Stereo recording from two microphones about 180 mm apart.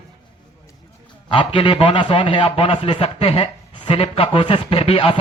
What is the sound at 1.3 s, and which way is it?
A man's voice, 30° left (ahead or behind).